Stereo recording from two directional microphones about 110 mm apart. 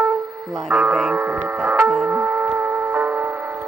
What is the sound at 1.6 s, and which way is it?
Music, centre (ahead or behind).